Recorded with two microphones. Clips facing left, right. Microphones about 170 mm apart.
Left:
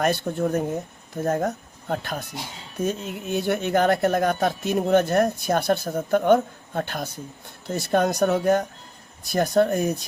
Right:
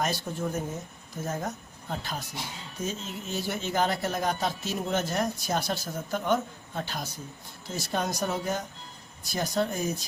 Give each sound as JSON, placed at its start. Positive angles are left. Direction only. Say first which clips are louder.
{"t": 0.0, "sound": "speech", "louder": "left 7 dB", "side_deg": 60}